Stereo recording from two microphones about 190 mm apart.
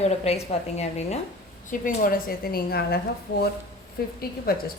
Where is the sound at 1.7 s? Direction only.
45° left (ahead or behind).